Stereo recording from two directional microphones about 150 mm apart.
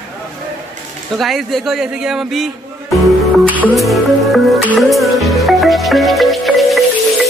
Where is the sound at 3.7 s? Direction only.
Centre (ahead or behind).